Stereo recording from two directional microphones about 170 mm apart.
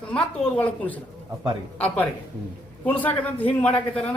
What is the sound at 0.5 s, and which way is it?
Speech, 10° left (ahead or behind).